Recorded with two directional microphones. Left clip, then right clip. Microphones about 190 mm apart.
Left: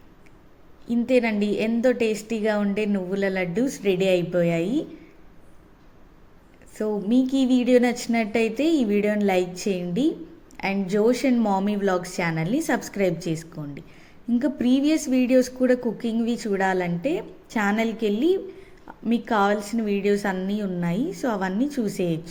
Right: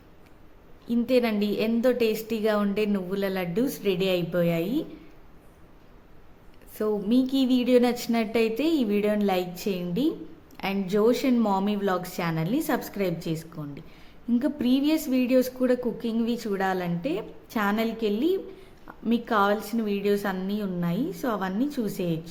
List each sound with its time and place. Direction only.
0.9 s a woman's voice: centre (ahead or behind)
6.7 s a woman's voice: centre (ahead or behind)